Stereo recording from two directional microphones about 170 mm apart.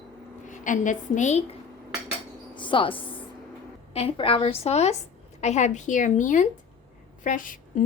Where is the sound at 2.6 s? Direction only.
30° left (ahead or behind).